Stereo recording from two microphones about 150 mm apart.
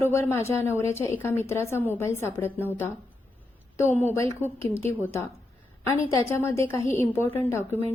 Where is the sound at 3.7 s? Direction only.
15° left (ahead or behind).